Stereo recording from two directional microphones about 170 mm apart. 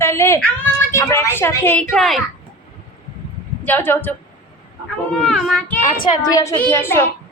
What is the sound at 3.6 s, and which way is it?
Speech, 10° left (ahead or behind).